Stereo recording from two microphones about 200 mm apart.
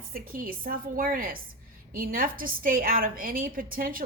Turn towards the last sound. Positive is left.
turn(degrees=-45)  # may be behind; listen again after turning